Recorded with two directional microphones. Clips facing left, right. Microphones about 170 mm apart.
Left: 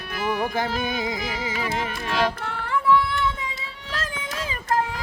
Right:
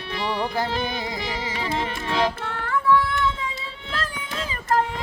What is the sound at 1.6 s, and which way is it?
Music, 25° right (ahead or behind).